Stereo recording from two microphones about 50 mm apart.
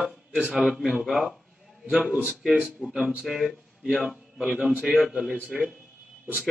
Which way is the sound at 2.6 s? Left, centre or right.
Centre.